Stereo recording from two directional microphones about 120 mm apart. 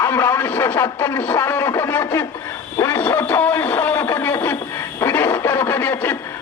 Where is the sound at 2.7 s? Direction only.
20° left (ahead or behind).